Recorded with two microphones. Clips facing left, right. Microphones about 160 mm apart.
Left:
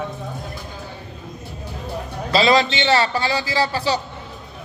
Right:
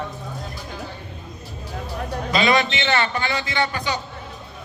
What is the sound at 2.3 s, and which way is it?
A man's voice, 30° left (ahead or behind).